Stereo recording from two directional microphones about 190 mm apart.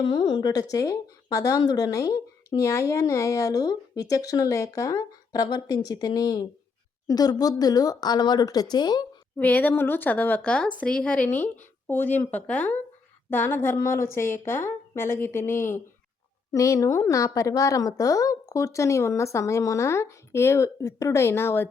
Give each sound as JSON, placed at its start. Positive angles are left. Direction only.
{"t": 0.1, "sound": "speech", "side_deg": 25}
{"t": 9.4, "sound": "speech", "side_deg": 10}